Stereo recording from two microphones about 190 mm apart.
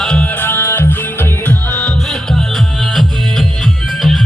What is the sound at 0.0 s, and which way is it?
Music, 5° left (ahead or behind).